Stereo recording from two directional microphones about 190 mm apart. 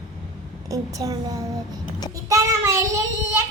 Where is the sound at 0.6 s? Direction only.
20° right (ahead or behind).